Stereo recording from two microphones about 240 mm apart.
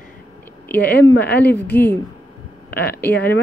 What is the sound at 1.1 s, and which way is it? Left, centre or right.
Speech, left.